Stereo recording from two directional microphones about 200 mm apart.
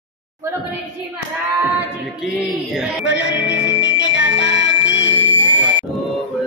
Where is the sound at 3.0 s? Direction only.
65° left (ahead or behind).